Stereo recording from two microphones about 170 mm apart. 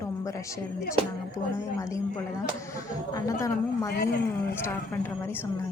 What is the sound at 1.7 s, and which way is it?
A woman's voice, 20° left (ahead or behind).